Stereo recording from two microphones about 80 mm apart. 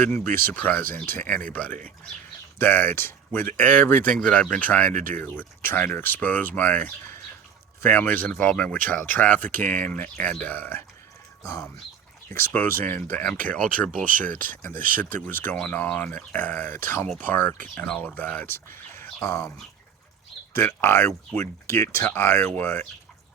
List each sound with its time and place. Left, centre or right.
0.0 s speech: left
12.5 s speech: left
20.5 s speech: left